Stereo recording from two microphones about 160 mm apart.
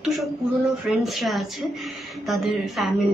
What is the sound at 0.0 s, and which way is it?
A woman's voice, centre (ahead or behind).